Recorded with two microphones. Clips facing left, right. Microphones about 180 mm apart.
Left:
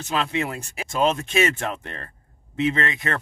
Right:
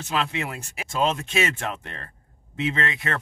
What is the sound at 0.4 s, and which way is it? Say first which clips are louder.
Speech: left 4 dB; 5° right (ahead or behind).